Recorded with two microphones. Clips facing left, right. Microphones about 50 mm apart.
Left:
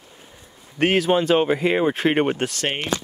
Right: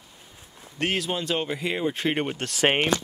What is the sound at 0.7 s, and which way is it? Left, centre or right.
Speech, left.